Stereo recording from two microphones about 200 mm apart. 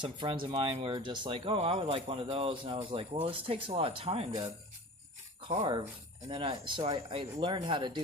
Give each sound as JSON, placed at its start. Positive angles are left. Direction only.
{"t": 0.0, "sound": "speech", "side_deg": -25}
{"t": 5.5, "sound": "speech", "side_deg": -25}